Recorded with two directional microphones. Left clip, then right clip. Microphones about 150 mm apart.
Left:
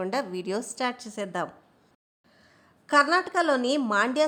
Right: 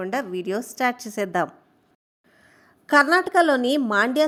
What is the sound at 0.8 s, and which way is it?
Speech, 30° right (ahead or behind).